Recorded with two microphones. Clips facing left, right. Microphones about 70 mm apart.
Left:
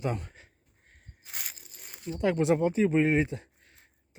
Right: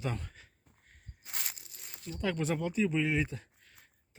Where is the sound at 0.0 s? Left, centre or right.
Centre.